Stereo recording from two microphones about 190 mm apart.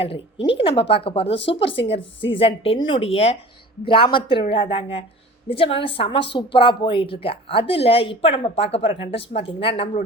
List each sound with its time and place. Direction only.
0.0 s a woman's voice: 30° left (ahead or behind)
1.2 s speech: 70° left (ahead or behind)
1.5 s a woman's voice: 30° left (ahead or behind)